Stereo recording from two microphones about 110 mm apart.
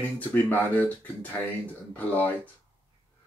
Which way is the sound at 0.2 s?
15° left (ahead or behind).